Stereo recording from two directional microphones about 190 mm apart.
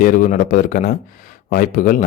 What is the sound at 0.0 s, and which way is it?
Speech, 50° left (ahead or behind).